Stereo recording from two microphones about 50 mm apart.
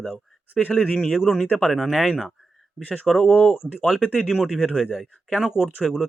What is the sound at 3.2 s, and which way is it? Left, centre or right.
Speech, left.